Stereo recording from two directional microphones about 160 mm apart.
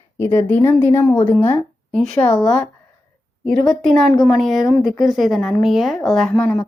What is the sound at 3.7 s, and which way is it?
A woman's voice, 5° left (ahead or behind).